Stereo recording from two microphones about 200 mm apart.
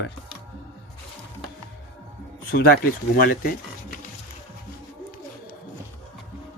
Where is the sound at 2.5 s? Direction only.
50° left (ahead or behind).